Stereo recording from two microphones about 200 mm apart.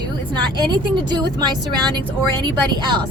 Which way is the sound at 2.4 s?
20° right (ahead or behind).